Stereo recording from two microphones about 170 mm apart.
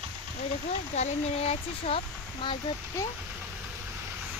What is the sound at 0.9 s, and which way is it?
Speech, 40° left (ahead or behind).